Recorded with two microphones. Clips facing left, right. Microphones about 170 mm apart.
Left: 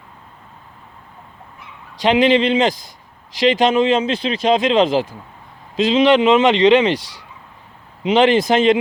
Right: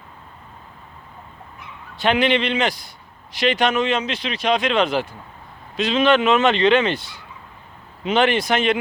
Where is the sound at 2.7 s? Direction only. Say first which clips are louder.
Left 5 dB; 90° left.